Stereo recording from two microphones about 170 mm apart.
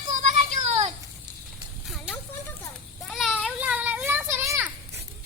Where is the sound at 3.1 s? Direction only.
Centre (ahead or behind).